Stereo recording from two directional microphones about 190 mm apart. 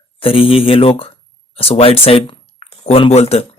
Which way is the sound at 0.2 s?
30° left (ahead or behind).